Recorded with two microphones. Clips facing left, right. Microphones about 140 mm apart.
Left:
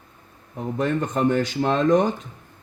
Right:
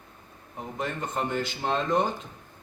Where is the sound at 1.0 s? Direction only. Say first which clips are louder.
Left 7 dB; 70° left (ahead or behind).